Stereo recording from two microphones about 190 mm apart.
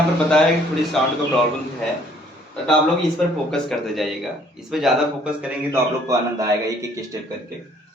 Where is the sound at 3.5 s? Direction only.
Centre (ahead or behind).